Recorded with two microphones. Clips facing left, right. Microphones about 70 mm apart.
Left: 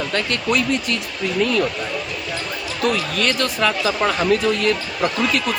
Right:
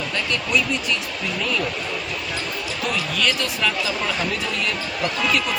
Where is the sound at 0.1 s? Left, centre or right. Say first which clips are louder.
Left 1 dB; left.